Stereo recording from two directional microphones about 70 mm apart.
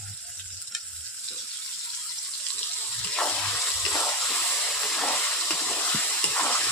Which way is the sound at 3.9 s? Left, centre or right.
Left.